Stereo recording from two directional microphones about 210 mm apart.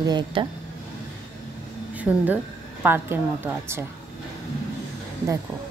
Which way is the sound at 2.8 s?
10° right (ahead or behind).